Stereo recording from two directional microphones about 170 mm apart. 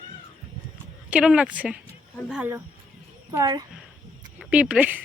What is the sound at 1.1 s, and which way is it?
A woman's voice, 5° right (ahead or behind).